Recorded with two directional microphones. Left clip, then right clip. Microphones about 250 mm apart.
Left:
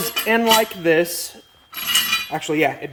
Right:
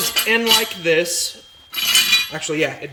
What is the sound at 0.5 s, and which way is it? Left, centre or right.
Speech, centre.